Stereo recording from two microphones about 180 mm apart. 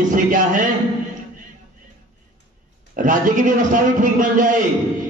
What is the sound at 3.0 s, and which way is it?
A man's voice, 45° right (ahead or behind).